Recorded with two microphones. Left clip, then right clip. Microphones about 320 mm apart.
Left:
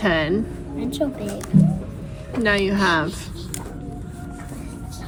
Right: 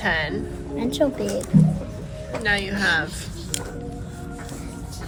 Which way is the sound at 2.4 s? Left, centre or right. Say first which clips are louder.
Left 3 dB; centre.